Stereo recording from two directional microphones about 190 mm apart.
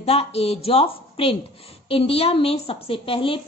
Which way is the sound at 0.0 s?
30° left (ahead or behind).